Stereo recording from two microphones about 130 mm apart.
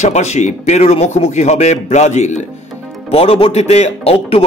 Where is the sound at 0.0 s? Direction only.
60° left (ahead or behind).